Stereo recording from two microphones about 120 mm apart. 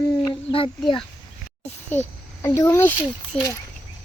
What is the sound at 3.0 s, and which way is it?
Speech, 40° left (ahead or behind).